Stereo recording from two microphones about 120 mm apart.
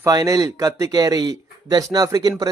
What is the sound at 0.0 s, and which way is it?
Speech, 30° right (ahead or behind).